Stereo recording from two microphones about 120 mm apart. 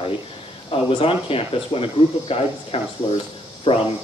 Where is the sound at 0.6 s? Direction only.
50° left (ahead or behind).